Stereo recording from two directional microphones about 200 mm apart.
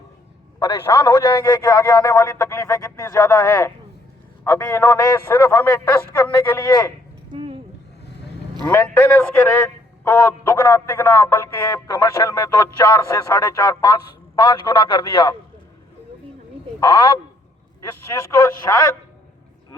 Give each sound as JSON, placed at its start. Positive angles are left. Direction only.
{"t": 0.6, "sound": "a man's voice", "side_deg": 15}
{"t": 7.3, "sound": "a sound", "side_deg": -25}
{"t": 8.6, "sound": "a man's voice", "side_deg": 10}
{"t": 16.8, "sound": "a man's voice", "side_deg": 20}